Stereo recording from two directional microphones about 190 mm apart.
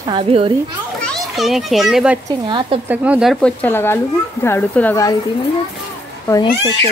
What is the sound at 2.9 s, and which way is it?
A woman's voice, 5° right (ahead or behind).